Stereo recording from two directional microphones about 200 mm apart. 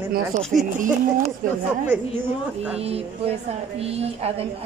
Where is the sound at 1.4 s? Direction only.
45° right (ahead or behind).